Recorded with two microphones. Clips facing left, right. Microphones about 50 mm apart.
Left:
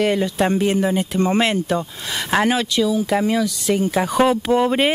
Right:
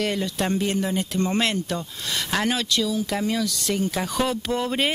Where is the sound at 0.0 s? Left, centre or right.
Centre.